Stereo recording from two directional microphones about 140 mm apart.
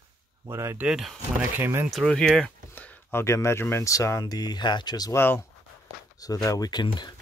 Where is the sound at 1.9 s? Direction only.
5° left (ahead or behind); by 5.2 s 30° left (ahead or behind).